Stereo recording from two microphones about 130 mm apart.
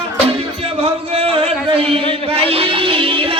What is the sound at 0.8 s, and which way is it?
Music, 50° right (ahead or behind).